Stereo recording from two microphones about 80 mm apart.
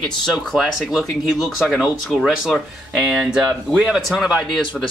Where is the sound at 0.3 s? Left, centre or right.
Centre.